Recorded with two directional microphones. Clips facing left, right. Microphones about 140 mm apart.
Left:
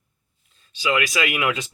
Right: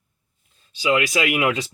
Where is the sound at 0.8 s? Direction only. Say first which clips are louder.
Right 3 dB; 35° right (ahead or behind).